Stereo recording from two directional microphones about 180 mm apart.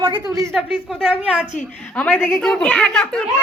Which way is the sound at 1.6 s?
5° left (ahead or behind).